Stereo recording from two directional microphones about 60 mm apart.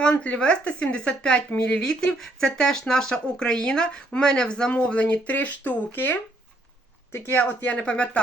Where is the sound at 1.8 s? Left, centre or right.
Centre; by 7.4 s left.